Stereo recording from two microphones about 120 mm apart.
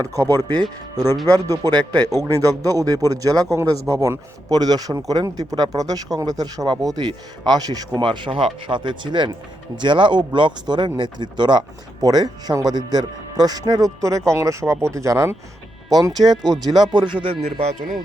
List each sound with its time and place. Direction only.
0.0 s speech: 30° right (ahead or behind)
16.4 s speech: 5° left (ahead or behind)
16.9 s speech: 40° right (ahead or behind)
17.4 s speech: 70° right (ahead or behind)